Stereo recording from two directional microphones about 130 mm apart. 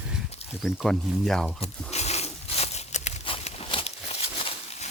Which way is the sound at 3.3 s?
45° left (ahead or behind).